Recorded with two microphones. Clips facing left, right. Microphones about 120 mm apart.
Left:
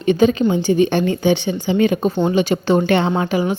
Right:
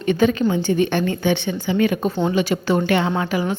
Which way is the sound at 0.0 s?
20° left (ahead or behind).